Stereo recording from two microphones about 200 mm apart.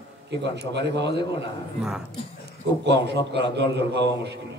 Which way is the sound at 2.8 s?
55° right (ahead or behind).